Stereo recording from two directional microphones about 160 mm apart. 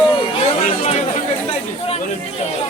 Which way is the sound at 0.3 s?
40° left (ahead or behind).